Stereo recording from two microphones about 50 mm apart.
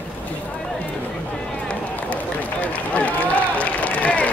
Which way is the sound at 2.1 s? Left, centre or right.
Left.